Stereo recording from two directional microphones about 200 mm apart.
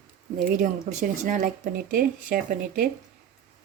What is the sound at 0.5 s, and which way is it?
Speech, 40° right (ahead or behind).